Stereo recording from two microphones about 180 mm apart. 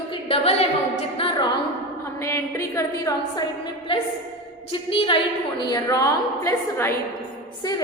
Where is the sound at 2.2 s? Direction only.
15° left (ahead or behind).